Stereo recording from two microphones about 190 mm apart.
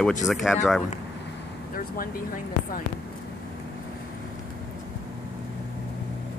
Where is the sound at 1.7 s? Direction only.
50° left (ahead or behind).